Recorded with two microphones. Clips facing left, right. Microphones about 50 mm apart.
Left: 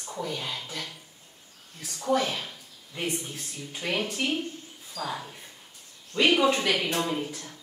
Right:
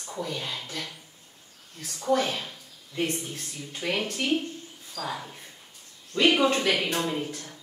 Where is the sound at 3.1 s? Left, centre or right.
Centre.